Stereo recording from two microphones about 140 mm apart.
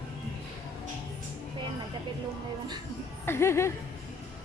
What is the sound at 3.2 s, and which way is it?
Speech, 15° left (ahead or behind).